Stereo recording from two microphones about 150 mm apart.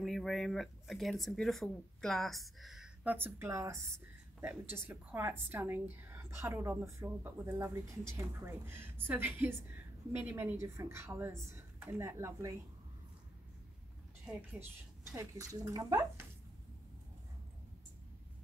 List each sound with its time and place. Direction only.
0.0 s a woman's voice: centre (ahead or behind); by 12.5 s 20° right (ahead or behind)
14.2 s a woman's voice: 10° right (ahead or behind)